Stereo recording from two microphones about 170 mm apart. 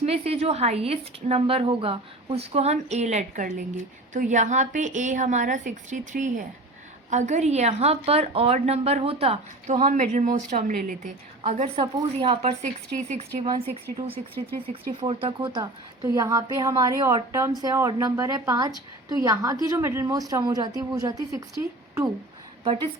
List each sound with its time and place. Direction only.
0.0 s a woman's voice: 35° right (ahead or behind)
9.7 s a woman's voice: 50° right (ahead or behind)
15.0 s a woman's voice: 30° right (ahead or behind)
22.6 s a woman's voice: 30° right (ahead or behind)